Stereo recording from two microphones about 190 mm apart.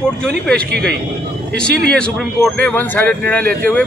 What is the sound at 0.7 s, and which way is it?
Speech, 60° right (ahead or behind).